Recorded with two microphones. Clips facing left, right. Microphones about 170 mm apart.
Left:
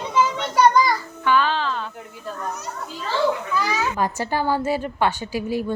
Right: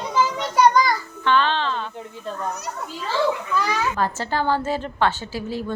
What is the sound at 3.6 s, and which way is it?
A child's voice, 5° left (ahead or behind).